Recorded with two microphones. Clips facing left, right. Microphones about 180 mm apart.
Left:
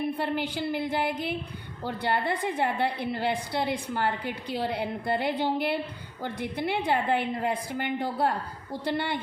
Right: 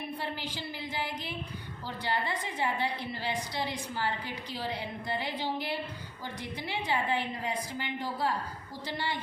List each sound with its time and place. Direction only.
0.2 s a woman's voice: 60° left (ahead or behind)